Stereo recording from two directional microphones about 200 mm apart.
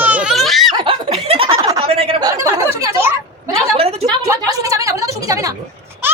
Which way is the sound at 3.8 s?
30° right (ahead or behind).